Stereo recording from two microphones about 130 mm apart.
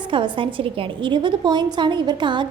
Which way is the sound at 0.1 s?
40° right (ahead or behind).